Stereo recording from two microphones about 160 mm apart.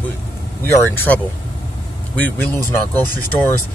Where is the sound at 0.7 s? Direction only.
10° left (ahead or behind).